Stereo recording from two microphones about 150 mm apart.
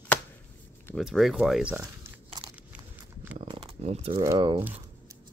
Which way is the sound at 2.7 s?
10° right (ahead or behind).